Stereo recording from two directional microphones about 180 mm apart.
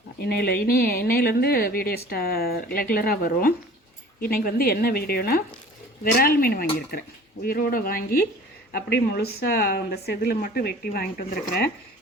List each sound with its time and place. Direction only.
0.2 s speech: 60° left (ahead or behind)